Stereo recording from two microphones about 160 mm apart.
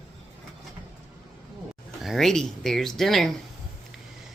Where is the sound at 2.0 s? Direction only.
Centre (ahead or behind).